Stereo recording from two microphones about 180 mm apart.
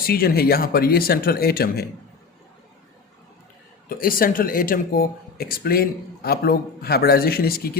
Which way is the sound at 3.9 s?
50° left (ahead or behind).